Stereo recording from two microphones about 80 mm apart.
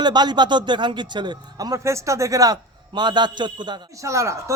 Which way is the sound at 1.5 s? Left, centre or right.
Right.